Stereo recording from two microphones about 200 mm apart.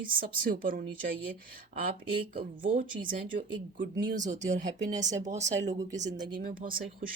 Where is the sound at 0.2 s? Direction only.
45° right (ahead or behind).